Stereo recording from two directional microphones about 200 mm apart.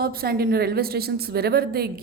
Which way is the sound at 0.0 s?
50° right (ahead or behind).